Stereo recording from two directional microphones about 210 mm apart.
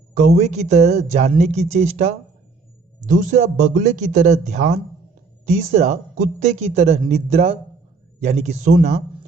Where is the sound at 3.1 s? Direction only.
35° right (ahead or behind).